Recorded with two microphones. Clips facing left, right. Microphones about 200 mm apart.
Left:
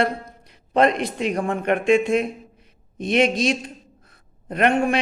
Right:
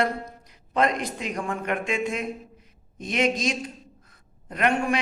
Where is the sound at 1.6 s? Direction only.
65° left (ahead or behind).